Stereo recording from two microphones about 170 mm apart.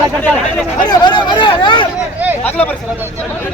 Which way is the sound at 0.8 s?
25° left (ahead or behind).